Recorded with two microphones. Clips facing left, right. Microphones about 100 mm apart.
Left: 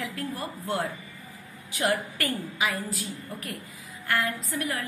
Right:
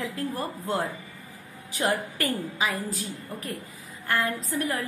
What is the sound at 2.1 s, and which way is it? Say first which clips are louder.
A woman's voice: right 2 dB; 35° right (ahead or behind).